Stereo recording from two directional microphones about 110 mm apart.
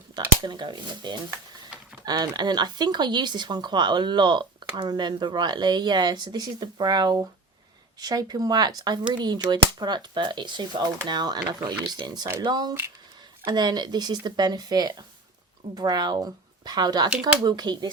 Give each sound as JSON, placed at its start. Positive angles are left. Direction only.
{"t": 0.4, "sound": "speech", "side_deg": -45}